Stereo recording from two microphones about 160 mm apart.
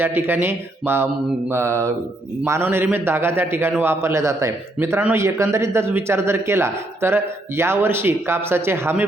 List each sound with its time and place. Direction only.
0.0 s a man's voice: 15° right (ahead or behind)